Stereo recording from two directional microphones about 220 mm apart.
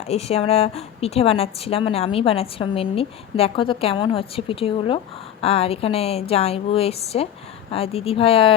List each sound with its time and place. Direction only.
0.1 s a woman's voice: 30° left (ahead or behind)